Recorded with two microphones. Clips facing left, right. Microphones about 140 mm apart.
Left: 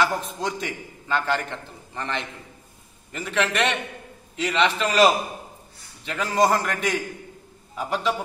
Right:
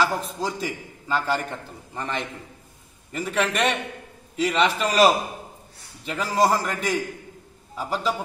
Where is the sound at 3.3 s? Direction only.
40° right (ahead or behind).